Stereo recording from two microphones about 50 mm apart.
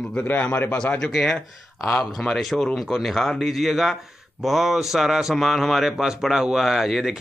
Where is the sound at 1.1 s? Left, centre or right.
Centre.